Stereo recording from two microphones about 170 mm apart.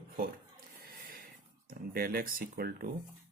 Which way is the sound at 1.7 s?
60° right (ahead or behind).